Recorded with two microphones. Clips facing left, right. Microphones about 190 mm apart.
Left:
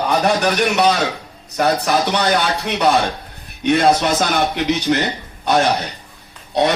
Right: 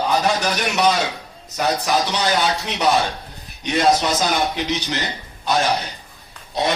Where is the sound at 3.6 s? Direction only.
55° left (ahead or behind).